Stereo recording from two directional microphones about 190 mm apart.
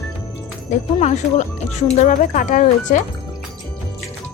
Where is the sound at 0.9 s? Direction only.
35° left (ahead or behind).